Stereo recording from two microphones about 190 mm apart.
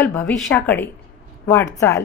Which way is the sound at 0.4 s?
10° left (ahead or behind).